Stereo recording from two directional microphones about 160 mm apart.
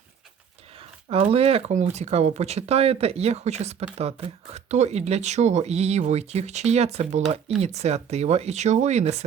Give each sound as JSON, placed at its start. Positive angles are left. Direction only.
{"t": 1.1, "sound": "speech", "side_deg": -40}